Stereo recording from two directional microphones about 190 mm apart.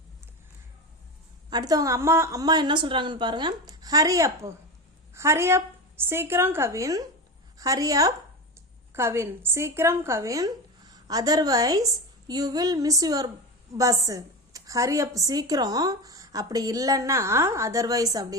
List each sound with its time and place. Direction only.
1.5 s a woman's voice: 20° right (ahead or behind)